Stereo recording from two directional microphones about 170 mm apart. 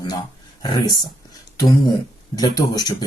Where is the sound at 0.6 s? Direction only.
25° left (ahead or behind).